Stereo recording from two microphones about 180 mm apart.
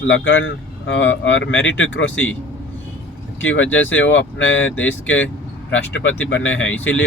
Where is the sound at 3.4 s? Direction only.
90° left.